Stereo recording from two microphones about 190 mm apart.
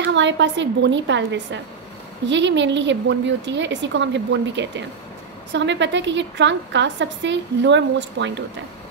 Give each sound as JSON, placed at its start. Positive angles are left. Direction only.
{"t": 0.0, "sound": "a woman's voice", "side_deg": -70}